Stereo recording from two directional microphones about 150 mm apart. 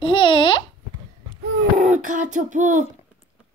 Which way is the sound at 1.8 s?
55° right (ahead or behind).